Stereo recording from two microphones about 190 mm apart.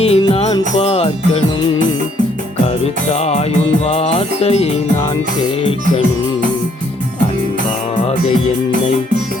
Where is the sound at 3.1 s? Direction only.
35° left (ahead or behind).